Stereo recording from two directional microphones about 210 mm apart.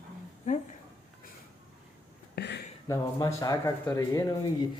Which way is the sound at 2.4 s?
55° left (ahead or behind).